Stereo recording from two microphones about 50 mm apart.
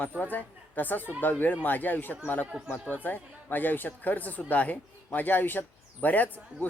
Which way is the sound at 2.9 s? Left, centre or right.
Left.